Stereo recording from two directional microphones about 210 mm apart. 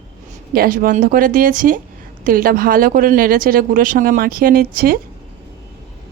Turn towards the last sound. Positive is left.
turn(degrees=-45)  # may be behind; listen again after turning